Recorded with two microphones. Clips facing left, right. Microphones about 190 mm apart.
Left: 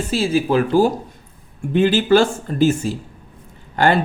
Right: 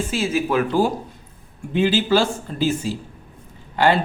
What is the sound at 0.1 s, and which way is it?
Speech, 35° left (ahead or behind).